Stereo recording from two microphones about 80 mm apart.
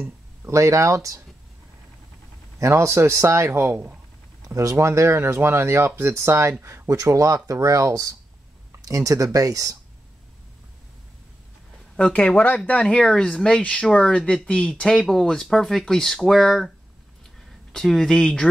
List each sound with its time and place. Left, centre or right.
0.5 s speech: right
2.6 s speech: right
4.5 s speech: right
12.0 s speech: centre